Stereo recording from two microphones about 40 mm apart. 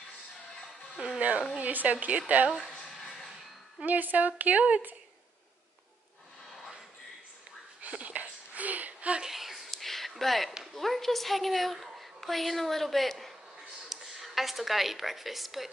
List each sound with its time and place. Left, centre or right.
0.9 s speech: right
1.6 s speech: right
3.0 s music: centre
3.8 s speech: right
7.8 s a sound: right
9.2 s a sound: centre
10.7 s a woman's voice: centre